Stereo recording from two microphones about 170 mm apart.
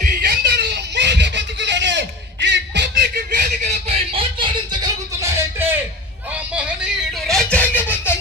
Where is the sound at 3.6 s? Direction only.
40° right (ahead or behind); by 5.7 s 15° right (ahead or behind).